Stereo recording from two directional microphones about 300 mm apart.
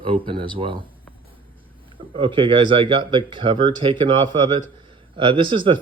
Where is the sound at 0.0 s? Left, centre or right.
Centre.